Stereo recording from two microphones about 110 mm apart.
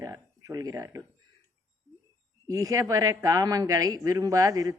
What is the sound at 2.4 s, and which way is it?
Speech, 30° right (ahead or behind).